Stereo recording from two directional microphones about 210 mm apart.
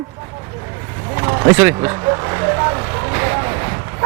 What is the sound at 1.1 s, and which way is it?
Vehicle, 20° right (ahead or behind).